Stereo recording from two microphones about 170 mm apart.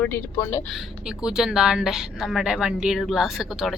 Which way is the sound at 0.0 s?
15° left (ahead or behind).